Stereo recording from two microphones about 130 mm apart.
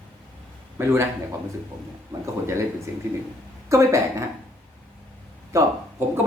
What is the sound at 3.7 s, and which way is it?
Speech, 25° right (ahead or behind).